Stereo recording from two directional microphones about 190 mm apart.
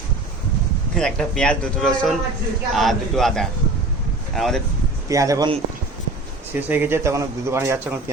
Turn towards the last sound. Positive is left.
turn(degrees=-15)  # may be behind; listen again after turning